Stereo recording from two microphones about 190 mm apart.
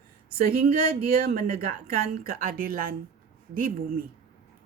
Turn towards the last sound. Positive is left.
turn(degrees=-50)  # may be behind; listen again after turning